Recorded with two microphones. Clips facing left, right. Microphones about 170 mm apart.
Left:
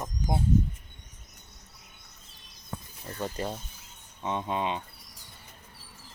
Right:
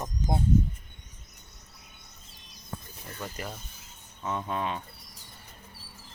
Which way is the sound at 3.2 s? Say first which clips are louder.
Left 6 dB; 30° left (ahead or behind).